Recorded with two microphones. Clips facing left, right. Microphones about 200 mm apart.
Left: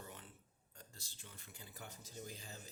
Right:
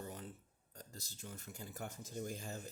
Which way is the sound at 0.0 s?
40° right (ahead or behind).